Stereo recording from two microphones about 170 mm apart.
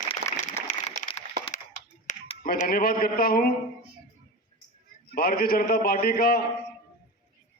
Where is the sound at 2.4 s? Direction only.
55° left (ahead or behind).